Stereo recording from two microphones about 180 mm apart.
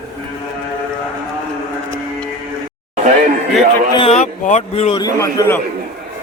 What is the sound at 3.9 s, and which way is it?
Speech, 35° left (ahead or behind).